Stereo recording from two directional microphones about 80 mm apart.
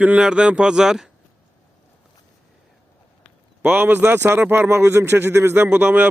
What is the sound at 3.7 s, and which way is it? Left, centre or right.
A man's voice, right.